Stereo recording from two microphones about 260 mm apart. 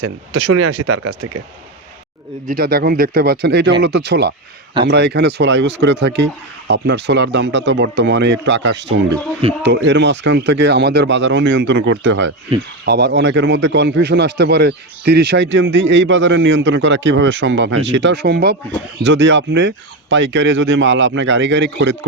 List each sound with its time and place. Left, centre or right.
0.0 s speech: right
2.5 s speech: right